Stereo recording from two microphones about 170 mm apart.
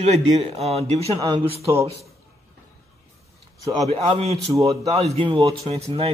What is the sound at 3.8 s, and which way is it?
Speech, 35° right (ahead or behind).